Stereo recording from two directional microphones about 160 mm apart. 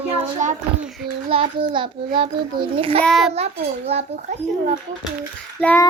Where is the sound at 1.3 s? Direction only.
35° right (ahead or behind).